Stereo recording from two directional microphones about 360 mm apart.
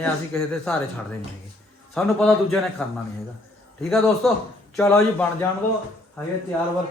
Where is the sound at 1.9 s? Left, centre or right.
Centre.